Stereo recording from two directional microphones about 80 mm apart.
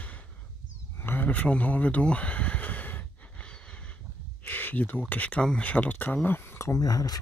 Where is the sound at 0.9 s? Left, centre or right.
Left.